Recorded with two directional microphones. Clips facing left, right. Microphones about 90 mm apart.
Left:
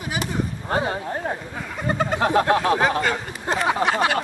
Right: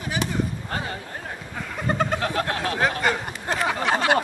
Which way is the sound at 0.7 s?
25° left (ahead or behind).